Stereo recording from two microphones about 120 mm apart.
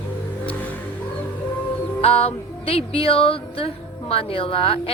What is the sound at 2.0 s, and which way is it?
Music, 55° left (ahead or behind).